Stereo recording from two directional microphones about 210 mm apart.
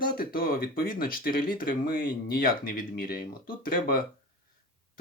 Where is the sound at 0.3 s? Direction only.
45° left (ahead or behind).